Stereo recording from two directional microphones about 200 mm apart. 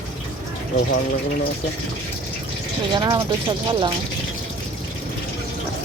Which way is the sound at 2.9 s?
25° right (ahead or behind).